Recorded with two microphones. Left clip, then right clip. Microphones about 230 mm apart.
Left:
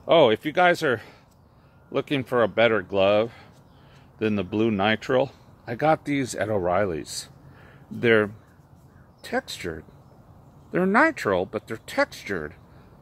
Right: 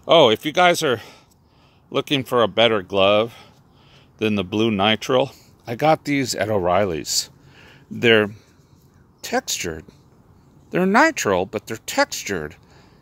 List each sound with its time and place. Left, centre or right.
0.0 s speech: right